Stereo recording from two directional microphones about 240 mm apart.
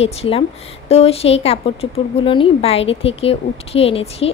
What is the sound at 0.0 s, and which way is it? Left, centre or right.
A woman's voice, left.